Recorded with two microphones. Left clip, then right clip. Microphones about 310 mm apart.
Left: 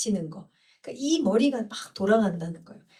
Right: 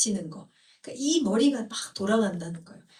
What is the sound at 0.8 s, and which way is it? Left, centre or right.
Speech, centre.